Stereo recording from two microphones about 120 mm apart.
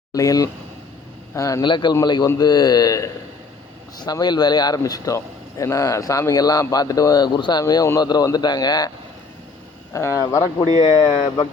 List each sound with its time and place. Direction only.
0.1 s a man's voice: 30° left (ahead or behind)
1.6 s speech: 40° left (ahead or behind)
9.9 s a man's voice: 25° left (ahead or behind)
10.7 s speech: 30° right (ahead or behind)